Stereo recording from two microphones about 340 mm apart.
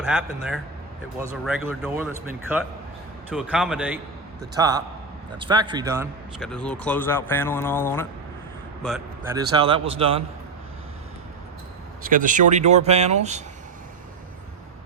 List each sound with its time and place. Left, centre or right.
0.0 s a man's voice: centre
6.7 s speech: centre
9.3 s a man's voice: centre
12.0 s speech: right